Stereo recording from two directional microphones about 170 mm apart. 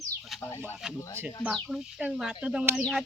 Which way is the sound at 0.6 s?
5° right (ahead or behind).